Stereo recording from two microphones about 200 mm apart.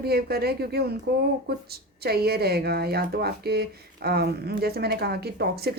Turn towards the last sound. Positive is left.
turn(degrees=-50)  # may be behind; listen again after turning